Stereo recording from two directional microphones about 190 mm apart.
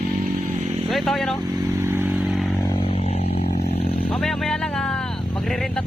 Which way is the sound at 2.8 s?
30° left (ahead or behind).